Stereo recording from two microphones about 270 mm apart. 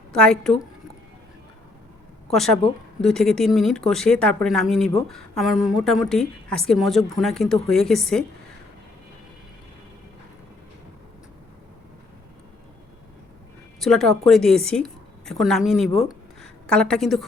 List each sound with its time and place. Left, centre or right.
0.1 s a woman's voice: centre
2.3 s speech: centre
13.7 s speech: centre
15.9 s speech: left
16.4 s a woman's voice: centre